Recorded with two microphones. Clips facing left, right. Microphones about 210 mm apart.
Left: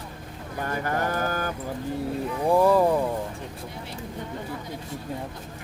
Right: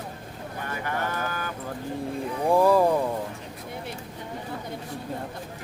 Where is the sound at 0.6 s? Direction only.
40° left (ahead or behind).